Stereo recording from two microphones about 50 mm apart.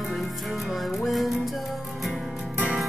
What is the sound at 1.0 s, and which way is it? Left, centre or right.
Music, centre.